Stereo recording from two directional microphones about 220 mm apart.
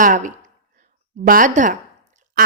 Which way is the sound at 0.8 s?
40° right (ahead or behind).